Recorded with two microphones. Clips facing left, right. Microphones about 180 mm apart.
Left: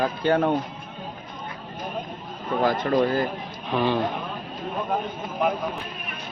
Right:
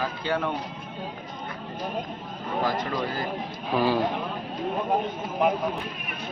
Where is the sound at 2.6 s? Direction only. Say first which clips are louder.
Left 4 dB; 55° left (ahead or behind).